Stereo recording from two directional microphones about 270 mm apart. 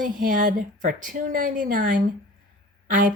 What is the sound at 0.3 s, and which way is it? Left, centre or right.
A woman's voice, right.